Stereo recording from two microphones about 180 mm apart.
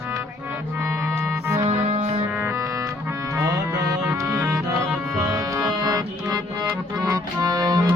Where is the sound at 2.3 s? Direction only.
10° right (ahead or behind).